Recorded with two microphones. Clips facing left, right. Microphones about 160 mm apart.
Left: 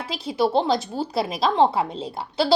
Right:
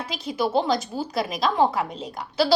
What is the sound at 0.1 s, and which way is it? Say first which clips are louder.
A woman's voice: left 3 dB; 30° left (ahead or behind).